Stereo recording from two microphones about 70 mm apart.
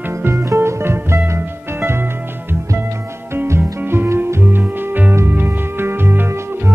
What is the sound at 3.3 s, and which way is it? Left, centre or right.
Music, right.